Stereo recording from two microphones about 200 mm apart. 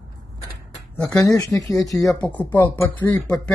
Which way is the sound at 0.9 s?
10° left (ahead or behind).